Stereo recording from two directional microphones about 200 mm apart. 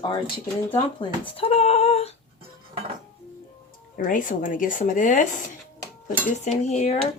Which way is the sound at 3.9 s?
40° left (ahead or behind).